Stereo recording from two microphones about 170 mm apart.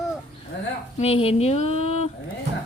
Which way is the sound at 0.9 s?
35° left (ahead or behind).